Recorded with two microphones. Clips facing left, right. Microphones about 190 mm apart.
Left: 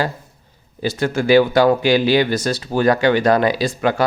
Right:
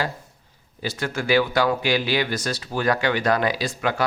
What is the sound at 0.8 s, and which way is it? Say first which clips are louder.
Speech: left 8 dB; 25° left (ahead or behind).